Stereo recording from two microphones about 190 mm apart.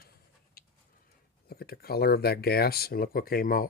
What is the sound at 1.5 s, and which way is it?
Speech, 55° left (ahead or behind).